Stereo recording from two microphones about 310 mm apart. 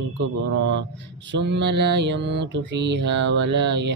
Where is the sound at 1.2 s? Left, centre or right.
Right.